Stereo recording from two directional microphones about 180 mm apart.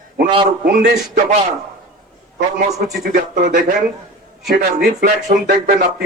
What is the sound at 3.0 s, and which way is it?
Speech, 50° right (ahead or behind).